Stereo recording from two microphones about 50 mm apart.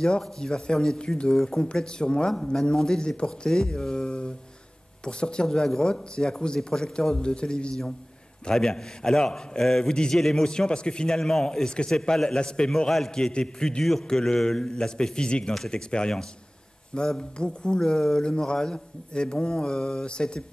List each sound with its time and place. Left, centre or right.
0.2 s a man's voice: centre
17.2 s a man's voice: centre